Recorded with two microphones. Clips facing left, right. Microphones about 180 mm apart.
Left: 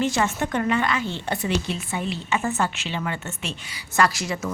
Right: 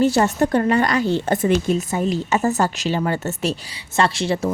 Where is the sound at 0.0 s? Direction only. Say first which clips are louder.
Right 7 dB; 40° right (ahead or behind).